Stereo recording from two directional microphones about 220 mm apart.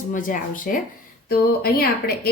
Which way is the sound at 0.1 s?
35° left (ahead or behind).